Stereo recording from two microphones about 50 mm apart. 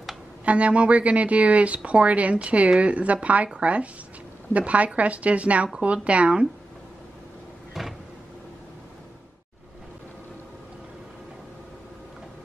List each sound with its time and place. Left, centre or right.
0.5 s a woman's voice: right